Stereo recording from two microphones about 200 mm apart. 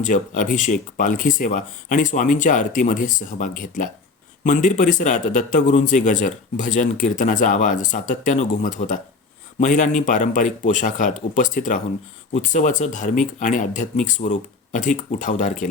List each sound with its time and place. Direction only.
0.0 s speech: 40° left (ahead or behind)